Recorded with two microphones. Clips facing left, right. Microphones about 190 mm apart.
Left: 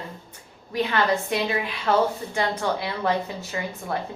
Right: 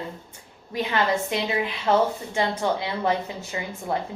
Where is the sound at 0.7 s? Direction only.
20° right (ahead or behind).